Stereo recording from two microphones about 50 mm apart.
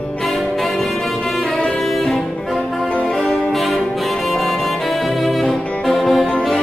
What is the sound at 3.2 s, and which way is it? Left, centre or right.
Music, centre.